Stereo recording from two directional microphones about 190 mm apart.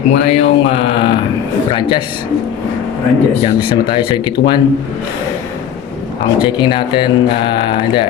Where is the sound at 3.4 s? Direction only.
25° left (ahead or behind).